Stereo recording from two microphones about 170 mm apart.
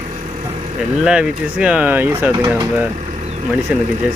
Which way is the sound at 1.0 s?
5° right (ahead or behind).